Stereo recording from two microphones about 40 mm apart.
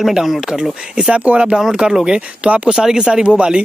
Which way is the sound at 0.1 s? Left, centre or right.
Centre.